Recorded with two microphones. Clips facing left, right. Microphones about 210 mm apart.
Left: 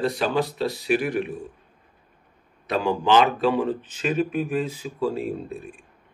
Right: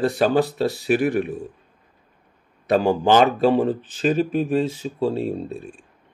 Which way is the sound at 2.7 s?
45° right (ahead or behind).